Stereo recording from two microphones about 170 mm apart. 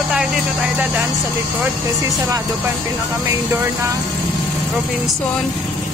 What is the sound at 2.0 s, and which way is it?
Speech, 20° right (ahead or behind).